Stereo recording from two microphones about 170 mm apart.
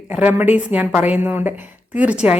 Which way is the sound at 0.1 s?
10° right (ahead or behind).